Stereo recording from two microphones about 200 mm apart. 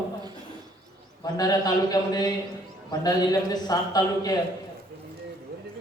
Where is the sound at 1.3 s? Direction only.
20° left (ahead or behind).